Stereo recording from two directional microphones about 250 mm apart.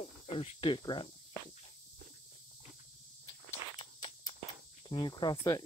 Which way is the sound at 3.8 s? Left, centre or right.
Centre.